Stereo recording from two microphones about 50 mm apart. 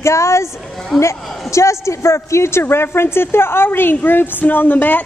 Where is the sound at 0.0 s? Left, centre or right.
Left.